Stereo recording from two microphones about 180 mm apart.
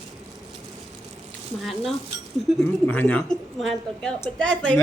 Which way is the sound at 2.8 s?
10° left (ahead or behind).